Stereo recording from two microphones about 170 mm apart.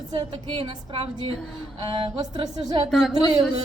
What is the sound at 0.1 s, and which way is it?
A woman's voice, 25° right (ahead or behind).